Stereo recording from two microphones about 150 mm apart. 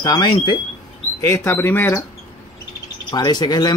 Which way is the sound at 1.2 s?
15° left (ahead or behind).